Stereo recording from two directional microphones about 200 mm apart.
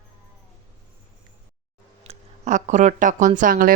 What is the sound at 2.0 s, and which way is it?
Speech, 35° right (ahead or behind).